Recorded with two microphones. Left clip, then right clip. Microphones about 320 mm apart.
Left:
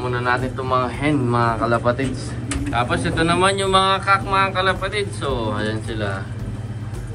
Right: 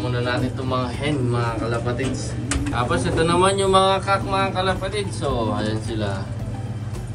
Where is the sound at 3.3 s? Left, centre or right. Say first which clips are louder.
Even; centre.